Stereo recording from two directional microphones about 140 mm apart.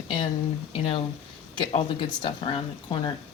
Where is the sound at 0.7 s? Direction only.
45° left (ahead or behind).